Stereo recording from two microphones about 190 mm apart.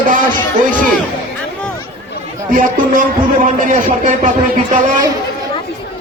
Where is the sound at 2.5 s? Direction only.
45° right (ahead or behind).